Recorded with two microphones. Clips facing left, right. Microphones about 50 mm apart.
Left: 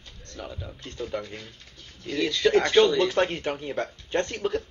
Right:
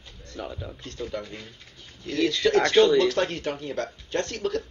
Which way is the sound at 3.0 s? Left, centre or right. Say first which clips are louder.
Right 1 dB; left.